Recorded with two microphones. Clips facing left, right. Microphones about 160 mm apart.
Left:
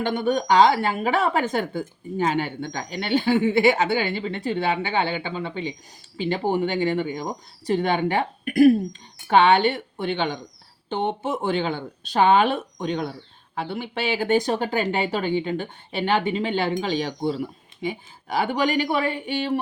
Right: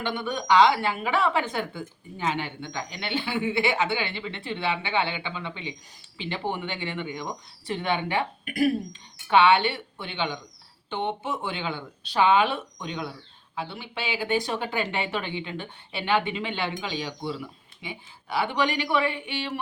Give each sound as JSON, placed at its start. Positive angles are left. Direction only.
{"t": 0.0, "sound": "speech", "side_deg": 40}